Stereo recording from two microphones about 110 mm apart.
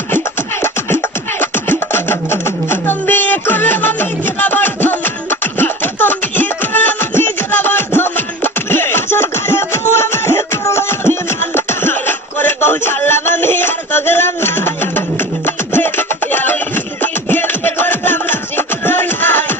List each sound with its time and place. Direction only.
1.4 s beatboxing: 20° left (ahead or behind)
15.4 s music: 20° left (ahead or behind)